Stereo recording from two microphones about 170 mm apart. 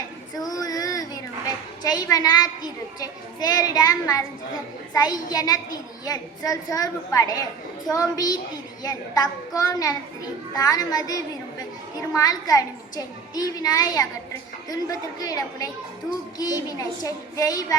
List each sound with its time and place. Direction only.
0.3 s a child's voice: 20° left (ahead or behind)